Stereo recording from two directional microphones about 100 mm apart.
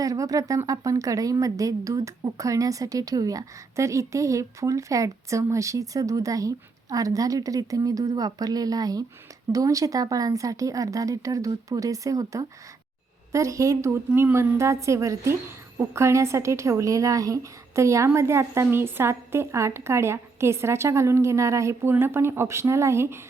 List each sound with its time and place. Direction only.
0.0 s a woman's voice: 35° right (ahead or behind)